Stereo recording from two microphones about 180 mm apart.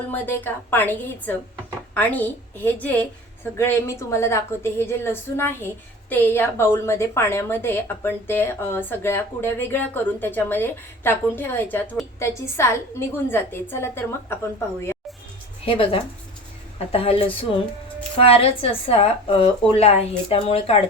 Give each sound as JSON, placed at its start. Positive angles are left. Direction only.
{"t": 0.1, "sound": "a woman's voice", "side_deg": 10}
{"t": 15.6, "sound": "a woman's voice", "side_deg": 30}
{"t": 18.4, "sound": "a woman's voice", "side_deg": 30}